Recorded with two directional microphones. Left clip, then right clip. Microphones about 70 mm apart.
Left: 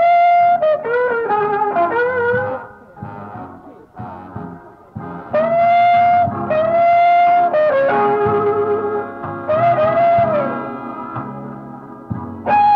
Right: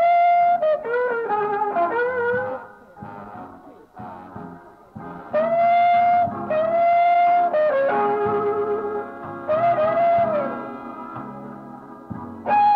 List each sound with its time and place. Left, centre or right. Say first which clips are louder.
0.0 s music: left 5 dB; right
5.0 s music: left 5 dB; right